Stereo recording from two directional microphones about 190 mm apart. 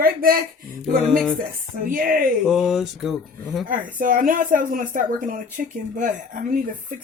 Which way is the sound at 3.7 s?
45° right (ahead or behind).